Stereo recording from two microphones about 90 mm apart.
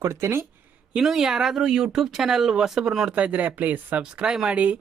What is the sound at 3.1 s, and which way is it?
A man's voice, 15° right (ahead or behind).